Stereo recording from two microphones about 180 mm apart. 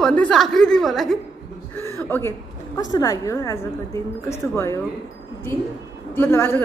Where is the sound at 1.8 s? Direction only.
15° left (ahead or behind).